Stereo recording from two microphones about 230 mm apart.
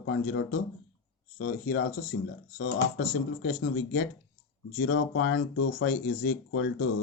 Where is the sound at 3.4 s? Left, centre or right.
Left.